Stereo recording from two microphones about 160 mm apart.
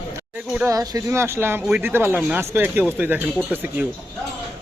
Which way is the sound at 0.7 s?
20° right (ahead or behind).